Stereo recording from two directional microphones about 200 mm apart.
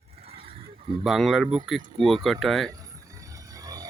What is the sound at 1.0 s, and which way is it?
Speech, centre (ahead or behind).